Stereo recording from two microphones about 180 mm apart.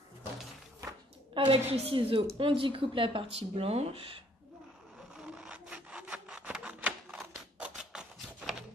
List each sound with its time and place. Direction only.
1.3 s speech: 30° right (ahead or behind)
5.1 s rub: 5° right (ahead or behind)